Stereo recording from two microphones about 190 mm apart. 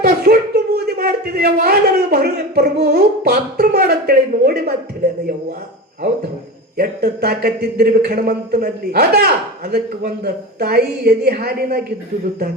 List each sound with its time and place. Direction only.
0.0 s speech: 55° right (ahead or behind)
6.7 s speech: 55° right (ahead or behind)